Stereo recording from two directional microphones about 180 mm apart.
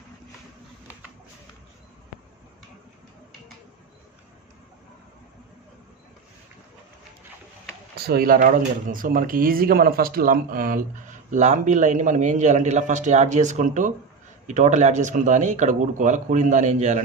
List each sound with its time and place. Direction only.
7.9 s speech: 60° right (ahead or behind); by 17.0 s 40° right (ahead or behind)